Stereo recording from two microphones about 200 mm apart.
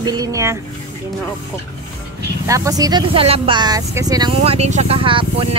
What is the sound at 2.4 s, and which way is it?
Speech, 15° right (ahead or behind).